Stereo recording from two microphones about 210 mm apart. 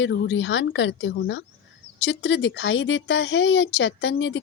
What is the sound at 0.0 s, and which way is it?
Speech, 60° left (ahead or behind).